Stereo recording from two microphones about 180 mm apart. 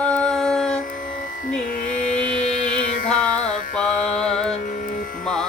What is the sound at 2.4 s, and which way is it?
Music, 40° left (ahead or behind).